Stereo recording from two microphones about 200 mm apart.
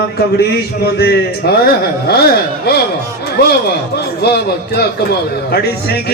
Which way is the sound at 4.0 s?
55° left (ahead or behind).